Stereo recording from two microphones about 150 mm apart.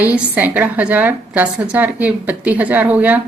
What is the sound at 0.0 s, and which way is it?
A woman's voice, 10° right (ahead or behind).